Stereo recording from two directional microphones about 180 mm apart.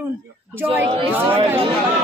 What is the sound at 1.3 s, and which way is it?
Speech, 30° right (ahead or behind).